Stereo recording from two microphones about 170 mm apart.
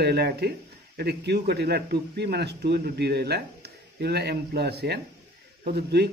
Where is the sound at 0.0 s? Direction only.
70° right (ahead or behind).